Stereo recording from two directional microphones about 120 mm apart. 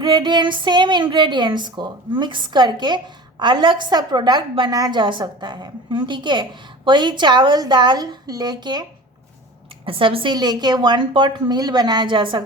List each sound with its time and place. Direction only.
0.0 s a woman's voice: 40° right (ahead or behind)
9.8 s a woman's voice: 50° right (ahead or behind)
10.3 s a woman's voice: 35° right (ahead or behind)